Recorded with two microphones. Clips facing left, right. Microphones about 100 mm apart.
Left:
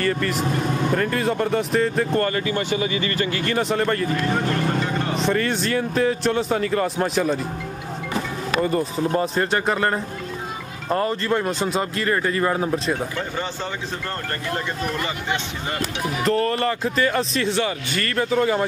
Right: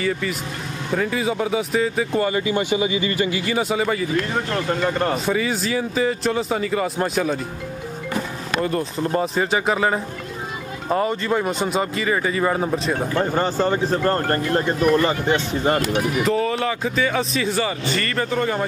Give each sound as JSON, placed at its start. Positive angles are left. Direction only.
{"t": 0.0, "sound": "speech", "side_deg": 0}
{"t": 4.8, "sound": "speech", "side_deg": -50}
{"t": 5.2, "sound": "speech", "side_deg": -5}
{"t": 8.6, "sound": "speech", "side_deg": 0}
{"t": 13.2, "sound": "speech", "side_deg": -45}
{"t": 16.3, "sound": "speech", "side_deg": 0}